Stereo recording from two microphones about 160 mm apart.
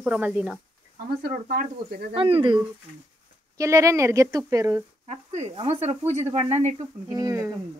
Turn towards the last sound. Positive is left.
turn(degrees=-20)  # may be behind; listen again after turning